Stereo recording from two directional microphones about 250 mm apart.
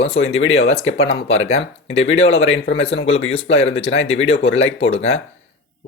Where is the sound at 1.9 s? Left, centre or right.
Left.